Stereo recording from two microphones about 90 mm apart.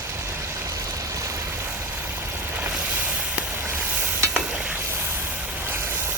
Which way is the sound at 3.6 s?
25° right (ahead or behind).